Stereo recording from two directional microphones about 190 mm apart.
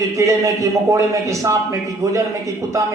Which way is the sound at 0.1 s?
15° right (ahead or behind).